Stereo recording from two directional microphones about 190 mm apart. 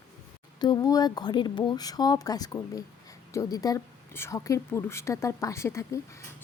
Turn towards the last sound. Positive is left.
turn(degrees=15)  # may be behind; listen again after turning